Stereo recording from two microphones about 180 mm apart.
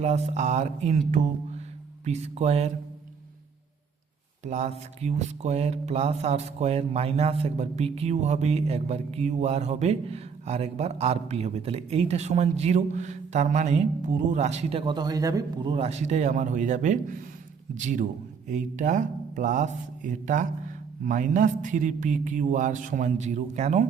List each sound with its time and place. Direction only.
0.0 s speech: 40° right (ahead or behind)
4.4 s a man's voice: 40° right (ahead or behind)